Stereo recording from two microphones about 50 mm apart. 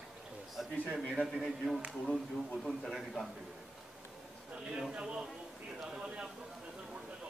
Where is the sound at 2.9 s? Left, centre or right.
Centre.